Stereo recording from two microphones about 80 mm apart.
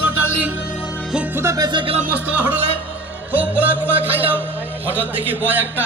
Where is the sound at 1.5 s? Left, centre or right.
Right.